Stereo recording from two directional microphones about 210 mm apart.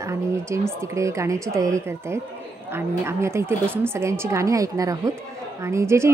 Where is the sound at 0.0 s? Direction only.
15° right (ahead or behind).